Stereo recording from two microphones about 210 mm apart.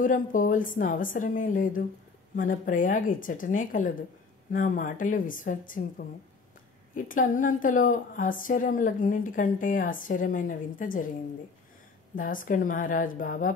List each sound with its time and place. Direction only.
0.0 s a woman's voice: 40° left (ahead or behind)
12.2 s a woman's voice: 40° left (ahead or behind)